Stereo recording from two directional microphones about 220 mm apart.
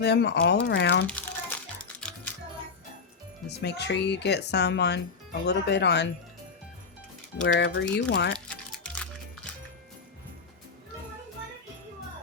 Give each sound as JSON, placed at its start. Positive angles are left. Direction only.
{"t": 0.0, "sound": "speech", "side_deg": 50}
{"t": 1.0, "sound": "crumpling", "side_deg": 5}
{"t": 2.0, "sound": "music", "side_deg": 5}
{"t": 3.6, "sound": "speech", "side_deg": 50}
{"t": 7.4, "sound": "speech", "side_deg": 55}
{"t": 8.4, "sound": "music", "side_deg": 5}